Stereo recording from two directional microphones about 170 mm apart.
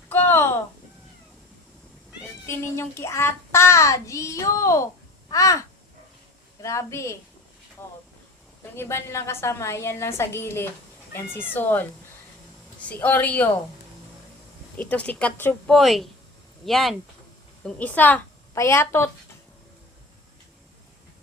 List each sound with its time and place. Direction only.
0.1 s a sound: 10° left (ahead or behind)
2.5 s child singing: 15° left (ahead or behind)
5.3 s speech: 20° left (ahead or behind)
6.6 s child singing: 15° left (ahead or behind)
12.9 s child singing: 10° left (ahead or behind)
14.8 s child singing: 10° left (ahead or behind)
16.6 s a woman's voice: centre (ahead or behind)